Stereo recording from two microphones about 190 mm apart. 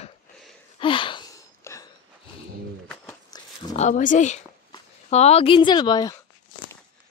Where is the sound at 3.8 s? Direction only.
40° left (ahead or behind); by 6.2 s 20° left (ahead or behind).